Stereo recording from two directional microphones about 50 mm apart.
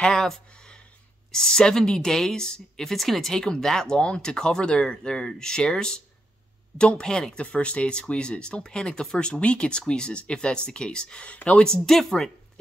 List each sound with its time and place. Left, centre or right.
0.0 s a woman's voice: centre
1.3 s a woman's voice: centre